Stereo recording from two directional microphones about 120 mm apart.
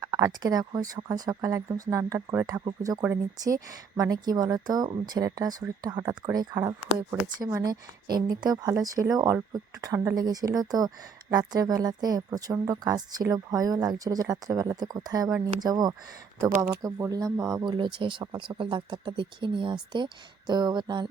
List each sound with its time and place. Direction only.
0.0 s a woman's voice: 30° right (ahead or behind)
2.5 s a woman's voice: 35° right (ahead or behind)